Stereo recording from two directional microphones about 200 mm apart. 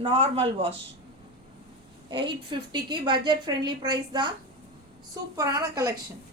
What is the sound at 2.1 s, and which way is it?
A woman's voice, 25° right (ahead or behind).